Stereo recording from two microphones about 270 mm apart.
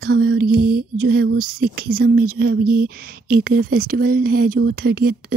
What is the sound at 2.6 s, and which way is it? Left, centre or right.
Speech, right.